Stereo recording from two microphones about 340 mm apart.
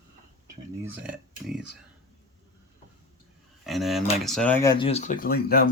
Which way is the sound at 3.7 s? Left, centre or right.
Centre.